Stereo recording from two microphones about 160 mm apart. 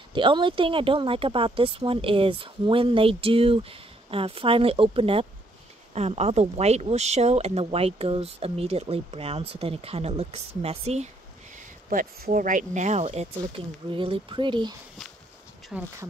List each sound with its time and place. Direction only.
0.1 s speech: 30° right (ahead or behind)
11.9 s speech: 60° right (ahead or behind); by 14.8 s 30° right (ahead or behind)
15.7 s speech: 5° right (ahead or behind)